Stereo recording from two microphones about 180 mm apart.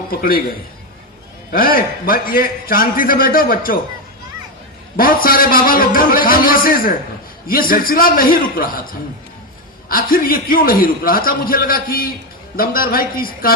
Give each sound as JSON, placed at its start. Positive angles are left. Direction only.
{"t": 0.1, "sound": "a man's voice", "side_deg": 55}
{"t": 1.5, "sound": "a man's voice", "side_deg": 55}
{"t": 4.9, "sound": "a man's voice", "side_deg": 50}